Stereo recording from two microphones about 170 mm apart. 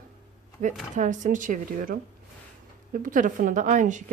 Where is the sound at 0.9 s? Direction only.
50° right (ahead or behind).